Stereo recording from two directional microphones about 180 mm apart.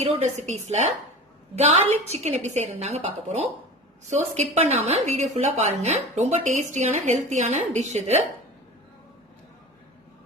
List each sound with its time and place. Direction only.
0.0 s a woman's voice: 40° right (ahead or behind)
1.9 s a woman's voice: 35° right (ahead or behind)